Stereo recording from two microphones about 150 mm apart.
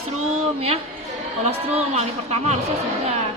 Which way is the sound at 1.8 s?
45° right (ahead or behind).